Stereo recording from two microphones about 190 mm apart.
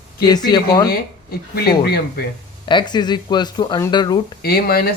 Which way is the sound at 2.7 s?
25° left (ahead or behind).